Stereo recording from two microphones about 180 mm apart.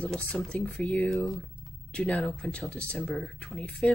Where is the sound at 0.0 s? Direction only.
5° left (ahead or behind).